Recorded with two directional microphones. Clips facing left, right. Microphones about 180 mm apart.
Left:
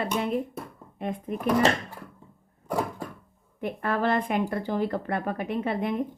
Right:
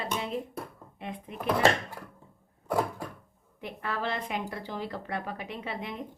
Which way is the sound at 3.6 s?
50° left (ahead or behind).